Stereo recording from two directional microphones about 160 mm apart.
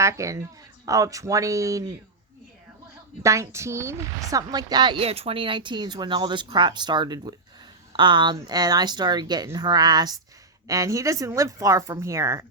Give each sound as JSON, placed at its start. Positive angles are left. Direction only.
{"t": 0.0, "sound": "a woman's voice", "side_deg": -20}
{"t": 3.2, "sound": "a woman's voice", "side_deg": -20}